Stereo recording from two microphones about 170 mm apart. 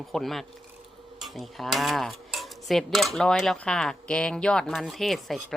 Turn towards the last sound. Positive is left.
turn(degrees=0)  # may be behind; listen again after turning